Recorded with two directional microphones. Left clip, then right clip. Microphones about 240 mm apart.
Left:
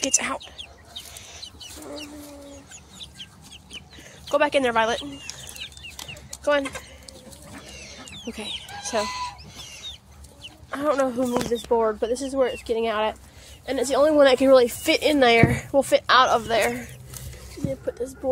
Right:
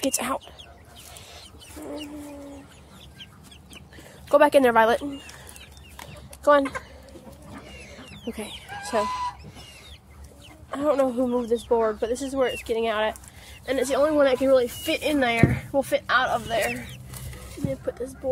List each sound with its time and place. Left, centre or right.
0.0 s speech: centre
4.3 s speech: right
7.9 s a sound: centre
8.4 s chicken: centre
10.7 s speech: centre
14.0 s speech: centre
17.6 s speech: centre